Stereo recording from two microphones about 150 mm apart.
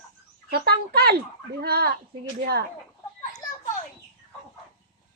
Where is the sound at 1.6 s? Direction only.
90° right.